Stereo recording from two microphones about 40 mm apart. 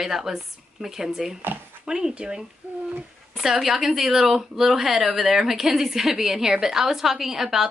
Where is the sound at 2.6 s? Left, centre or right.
Right.